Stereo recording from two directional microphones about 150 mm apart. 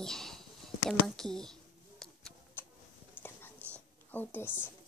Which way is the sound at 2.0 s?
Centre (ahead or behind).